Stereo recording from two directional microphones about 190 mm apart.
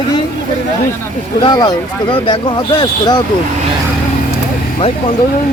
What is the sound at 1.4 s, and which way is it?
Speech, 20° left (ahead or behind).